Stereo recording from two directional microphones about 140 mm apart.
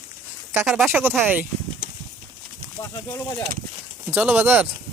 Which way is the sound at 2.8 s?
25° left (ahead or behind).